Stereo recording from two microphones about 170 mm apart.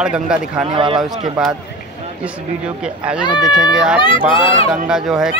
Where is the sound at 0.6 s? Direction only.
30° right (ahead or behind).